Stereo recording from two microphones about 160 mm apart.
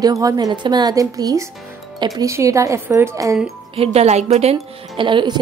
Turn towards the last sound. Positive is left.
turn(degrees=-30)  # may be behind; listen again after turning